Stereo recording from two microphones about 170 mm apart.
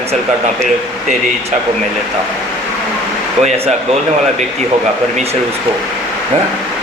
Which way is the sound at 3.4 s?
40° right (ahead or behind).